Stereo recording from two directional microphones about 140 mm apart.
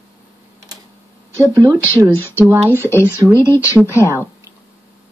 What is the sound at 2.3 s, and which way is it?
Speech, 15° right (ahead or behind).